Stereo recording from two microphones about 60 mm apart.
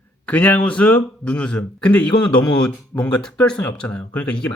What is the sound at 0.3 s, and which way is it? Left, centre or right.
Speech, left.